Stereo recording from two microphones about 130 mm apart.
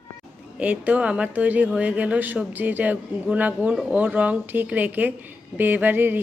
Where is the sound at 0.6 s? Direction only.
10° right (ahead or behind).